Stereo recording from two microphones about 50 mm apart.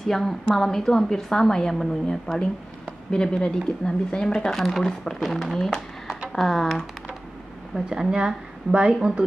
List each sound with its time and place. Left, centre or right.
0.0 s speech: centre
7.7 s speech: centre